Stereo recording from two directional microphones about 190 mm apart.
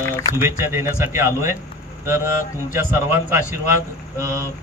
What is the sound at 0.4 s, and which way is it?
Speech, 15° right (ahead or behind).